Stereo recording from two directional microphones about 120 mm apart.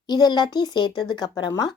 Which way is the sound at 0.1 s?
35° left (ahead or behind).